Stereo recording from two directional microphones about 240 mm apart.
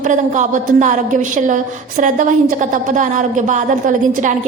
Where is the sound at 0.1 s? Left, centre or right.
Right.